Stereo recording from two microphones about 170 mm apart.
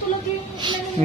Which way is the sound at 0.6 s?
25° right (ahead or behind).